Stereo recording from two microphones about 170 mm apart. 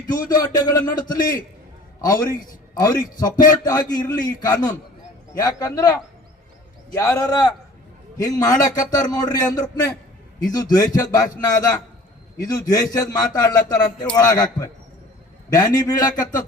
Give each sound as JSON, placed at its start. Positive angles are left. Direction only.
{"t": 0.0, "sound": "a man's voice", "side_deg": 20}
{"t": 12.4, "sound": "a man's voice", "side_deg": 20}